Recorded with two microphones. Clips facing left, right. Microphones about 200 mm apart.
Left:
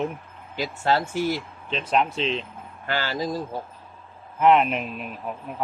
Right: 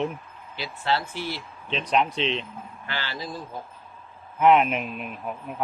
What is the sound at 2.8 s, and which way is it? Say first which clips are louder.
Speech: left 8 dB; 45° left (ahead or behind).